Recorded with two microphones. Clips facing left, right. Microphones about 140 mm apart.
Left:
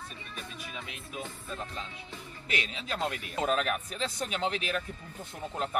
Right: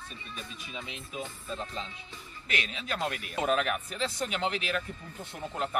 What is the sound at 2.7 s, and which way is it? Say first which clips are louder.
Speech: even; centre (ahead or behind).